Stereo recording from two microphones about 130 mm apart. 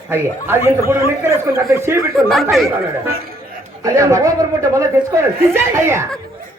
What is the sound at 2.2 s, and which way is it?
Speech, centre (ahead or behind).